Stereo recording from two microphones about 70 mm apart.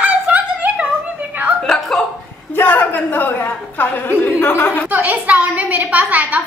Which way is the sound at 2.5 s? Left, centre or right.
Left.